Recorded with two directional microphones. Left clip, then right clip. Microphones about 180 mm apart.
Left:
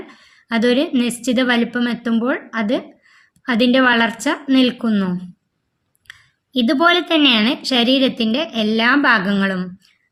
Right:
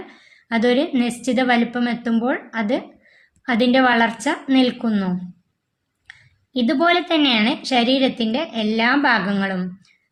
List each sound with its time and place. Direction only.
0.1 s a woman's voice: 40° left (ahead or behind)